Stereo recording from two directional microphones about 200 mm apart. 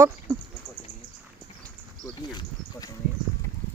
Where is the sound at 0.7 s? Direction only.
5° left (ahead or behind).